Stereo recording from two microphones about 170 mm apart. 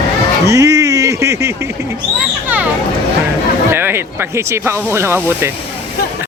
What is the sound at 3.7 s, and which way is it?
Speech, 15° right (ahead or behind).